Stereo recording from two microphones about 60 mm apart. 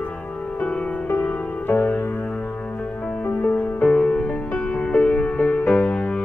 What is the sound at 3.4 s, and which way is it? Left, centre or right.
Music, left.